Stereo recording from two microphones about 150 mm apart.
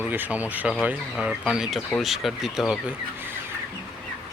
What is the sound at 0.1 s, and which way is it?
Speech, 10° right (ahead or behind).